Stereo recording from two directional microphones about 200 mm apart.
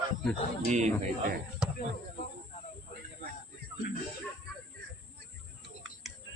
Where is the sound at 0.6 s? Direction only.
35° right (ahead or behind).